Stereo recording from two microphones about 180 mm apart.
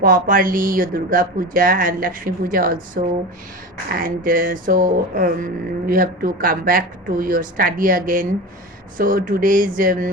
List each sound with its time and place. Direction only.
0.0 s speech: 50° right (ahead or behind)